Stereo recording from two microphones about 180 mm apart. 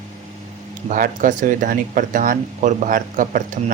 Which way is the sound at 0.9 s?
50° right (ahead or behind).